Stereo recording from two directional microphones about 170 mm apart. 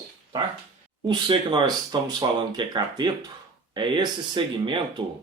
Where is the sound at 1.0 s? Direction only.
25° right (ahead or behind).